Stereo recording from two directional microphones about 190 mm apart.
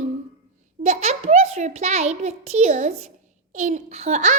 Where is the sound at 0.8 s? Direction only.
35° right (ahead or behind).